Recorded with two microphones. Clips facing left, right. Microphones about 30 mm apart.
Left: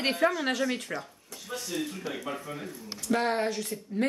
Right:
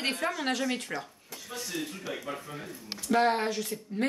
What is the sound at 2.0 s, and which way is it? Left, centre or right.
Speech, left.